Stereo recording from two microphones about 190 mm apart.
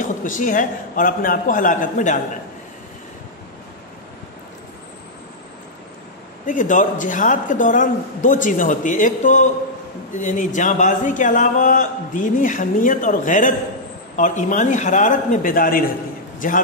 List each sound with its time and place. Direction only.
0.2 s a man's voice: 45° left (ahead or behind)
6.4 s a man's voice: 45° left (ahead or behind)